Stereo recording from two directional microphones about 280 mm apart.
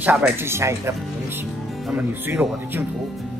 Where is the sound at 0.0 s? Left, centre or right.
Centre.